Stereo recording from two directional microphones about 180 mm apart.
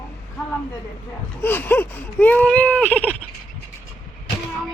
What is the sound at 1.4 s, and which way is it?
Speech, 10° left (ahead or behind).